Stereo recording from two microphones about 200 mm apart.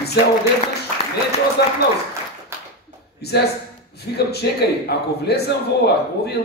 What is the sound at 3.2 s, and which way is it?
A man's voice, 55° left (ahead or behind).